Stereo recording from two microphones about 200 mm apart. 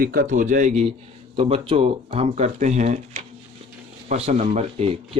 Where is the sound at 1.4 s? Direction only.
25° right (ahead or behind).